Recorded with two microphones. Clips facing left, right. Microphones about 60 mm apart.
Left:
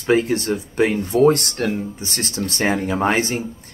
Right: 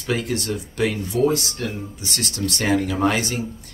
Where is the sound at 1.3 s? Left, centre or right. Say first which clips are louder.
Left 6 dB; left.